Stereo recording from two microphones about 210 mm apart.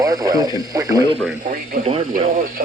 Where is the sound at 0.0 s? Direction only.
15° right (ahead or behind).